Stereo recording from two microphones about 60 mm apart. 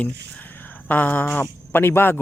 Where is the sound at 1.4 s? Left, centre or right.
Left.